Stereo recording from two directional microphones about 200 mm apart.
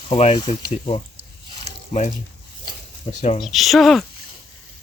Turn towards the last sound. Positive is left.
turn(degrees=0)  # may be behind; listen again after turning